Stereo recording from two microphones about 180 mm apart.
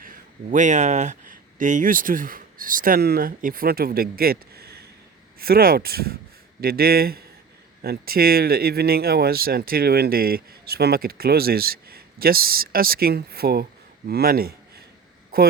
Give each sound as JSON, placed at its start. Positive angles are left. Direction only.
{"t": 0.5, "sound": "a man's voice", "side_deg": -40}